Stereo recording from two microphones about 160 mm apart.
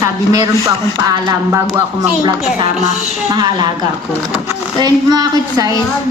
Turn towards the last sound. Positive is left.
turn(degrees=-25)  # may be behind; listen again after turning